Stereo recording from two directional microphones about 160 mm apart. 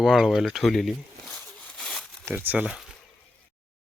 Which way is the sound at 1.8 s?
Centre (ahead or behind).